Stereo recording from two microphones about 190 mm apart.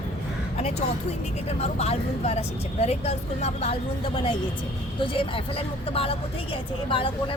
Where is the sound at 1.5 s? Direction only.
35° left (ahead or behind).